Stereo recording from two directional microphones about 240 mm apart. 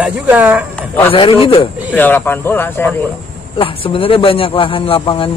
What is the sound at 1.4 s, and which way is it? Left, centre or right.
Speech, left.